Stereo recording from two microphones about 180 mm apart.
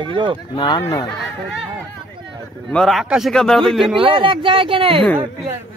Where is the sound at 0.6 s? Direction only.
20° left (ahead or behind).